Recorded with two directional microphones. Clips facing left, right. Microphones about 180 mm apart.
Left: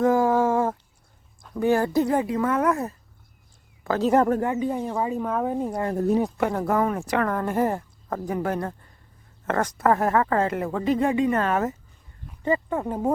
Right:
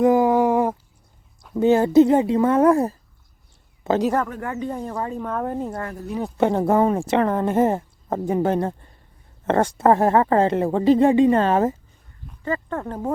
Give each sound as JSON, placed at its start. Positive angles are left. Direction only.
{"t": 0.0, "sound": "a sound", "side_deg": -20}
{"t": 1.5, "sound": "speech", "side_deg": -20}
{"t": 4.4, "sound": "speech", "side_deg": 20}
{"t": 4.6, "sound": "speech", "side_deg": 5}
{"t": 6.3, "sound": "speech", "side_deg": -25}
{"t": 12.4, "sound": "speech", "side_deg": 20}